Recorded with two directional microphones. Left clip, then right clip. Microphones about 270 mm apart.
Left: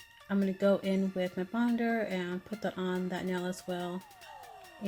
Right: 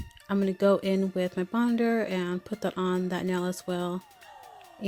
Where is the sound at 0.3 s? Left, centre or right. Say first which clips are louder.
Right 5 dB; right.